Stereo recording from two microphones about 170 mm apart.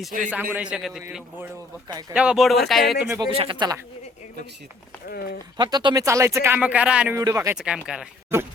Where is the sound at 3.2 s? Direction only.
30° right (ahead or behind).